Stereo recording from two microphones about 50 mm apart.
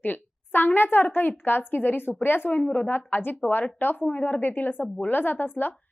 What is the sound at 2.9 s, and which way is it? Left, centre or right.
A woman's voice, left.